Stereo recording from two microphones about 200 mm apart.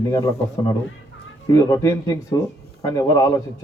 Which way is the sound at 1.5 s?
15° left (ahead or behind).